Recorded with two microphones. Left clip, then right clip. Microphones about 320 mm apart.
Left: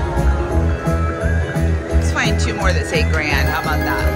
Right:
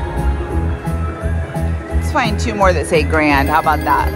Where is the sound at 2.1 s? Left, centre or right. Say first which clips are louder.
Right 4 dB; centre.